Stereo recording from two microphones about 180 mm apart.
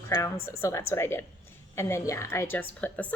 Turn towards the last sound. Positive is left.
turn(degrees=10)  # may be behind; listen again after turning